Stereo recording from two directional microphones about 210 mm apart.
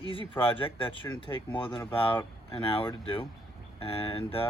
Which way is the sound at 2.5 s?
25° left (ahead or behind).